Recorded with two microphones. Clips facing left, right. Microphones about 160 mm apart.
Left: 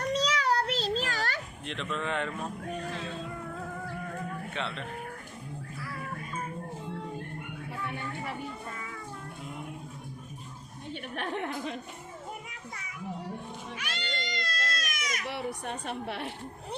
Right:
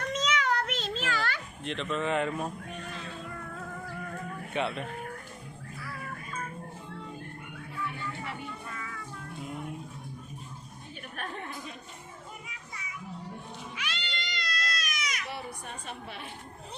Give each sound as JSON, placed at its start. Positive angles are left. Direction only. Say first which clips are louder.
{"t": 0.0, "sound": "a sound", "louder": "left 2 dB", "side_deg": 35}
{"t": 1.6, "sound": "speech", "louder": "right 4 dB", "side_deg": 0}
{"t": 4.5, "sound": "speech", "louder": "right 8 dB", "side_deg": -10}
{"t": 8.7, "sound": "music", "louder": "even", "side_deg": 25}
{"t": 10.9, "sound": "a sound", "louder": "left 5 dB", "side_deg": 75}
{"t": 13.7, "sound": "baby cry", "louder": "left 2 dB", "side_deg": 45}
{"t": 15.3, "sound": "a woman's voice", "louder": "left 5 dB", "side_deg": 70}